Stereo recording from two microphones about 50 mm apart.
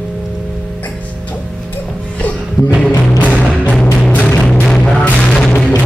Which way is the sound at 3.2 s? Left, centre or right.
Left.